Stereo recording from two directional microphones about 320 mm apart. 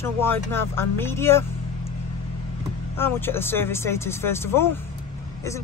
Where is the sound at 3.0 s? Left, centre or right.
Centre.